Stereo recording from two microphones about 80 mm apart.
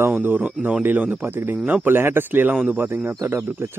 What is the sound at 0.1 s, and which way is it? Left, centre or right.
A man's voice, right.